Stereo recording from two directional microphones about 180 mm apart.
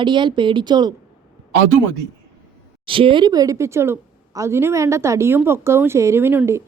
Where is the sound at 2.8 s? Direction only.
30° right (ahead or behind).